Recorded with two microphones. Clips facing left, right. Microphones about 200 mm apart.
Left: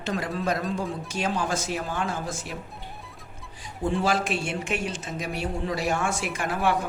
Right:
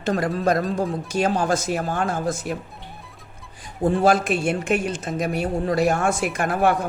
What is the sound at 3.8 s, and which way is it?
A man's voice, 50° right (ahead or behind).